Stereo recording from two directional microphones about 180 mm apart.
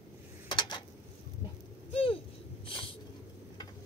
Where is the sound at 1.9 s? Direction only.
30° left (ahead or behind).